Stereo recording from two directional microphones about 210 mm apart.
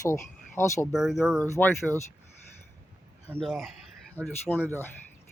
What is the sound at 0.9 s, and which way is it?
Speech, centre (ahead or behind).